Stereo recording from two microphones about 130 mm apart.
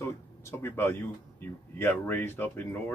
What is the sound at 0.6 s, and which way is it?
Speech, 20° left (ahead or behind).